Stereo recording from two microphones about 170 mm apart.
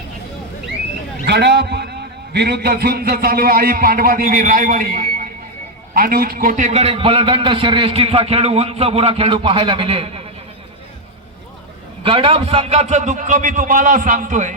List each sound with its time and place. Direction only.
1.2 s a man's voice: 75° right (ahead or behind); by 6.7 s 55° right (ahead or behind)
6.7 s a man's voice: 40° right (ahead or behind)
12.0 s a man's voice: 30° right (ahead or behind); by 14.5 s 45° right (ahead or behind)